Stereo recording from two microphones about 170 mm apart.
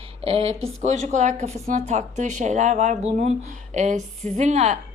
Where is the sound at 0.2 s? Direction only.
35° right (ahead or behind).